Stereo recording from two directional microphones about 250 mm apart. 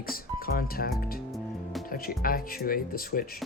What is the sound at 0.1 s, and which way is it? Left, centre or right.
Speech, left.